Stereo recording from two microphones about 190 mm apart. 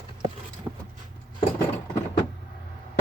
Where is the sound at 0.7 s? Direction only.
10° right (ahead or behind).